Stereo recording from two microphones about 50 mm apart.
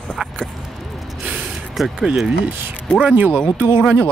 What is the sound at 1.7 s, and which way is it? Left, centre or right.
Speech, centre.